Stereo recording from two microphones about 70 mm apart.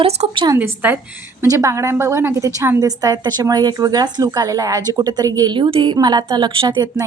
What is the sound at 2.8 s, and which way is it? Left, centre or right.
A woman's voice, right.